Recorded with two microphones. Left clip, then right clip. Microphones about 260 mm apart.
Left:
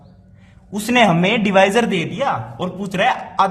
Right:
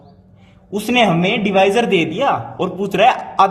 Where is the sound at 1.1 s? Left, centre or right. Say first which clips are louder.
Even; centre.